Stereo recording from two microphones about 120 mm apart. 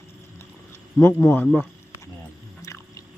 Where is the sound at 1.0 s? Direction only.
20° left (ahead or behind).